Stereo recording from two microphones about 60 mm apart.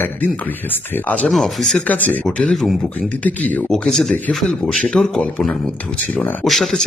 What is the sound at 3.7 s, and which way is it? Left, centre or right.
Speech, centre.